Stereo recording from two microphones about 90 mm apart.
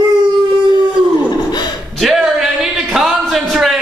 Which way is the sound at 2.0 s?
Centre (ahead or behind).